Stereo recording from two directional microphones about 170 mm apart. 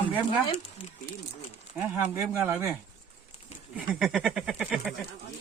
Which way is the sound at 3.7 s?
5° right (ahead or behind).